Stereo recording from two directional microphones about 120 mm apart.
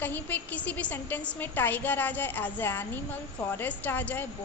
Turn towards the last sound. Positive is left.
turn(degrees=15)  # may be behind; listen again after turning